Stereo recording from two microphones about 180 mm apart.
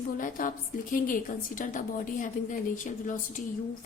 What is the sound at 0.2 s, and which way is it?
A woman's voice, 45° left (ahead or behind).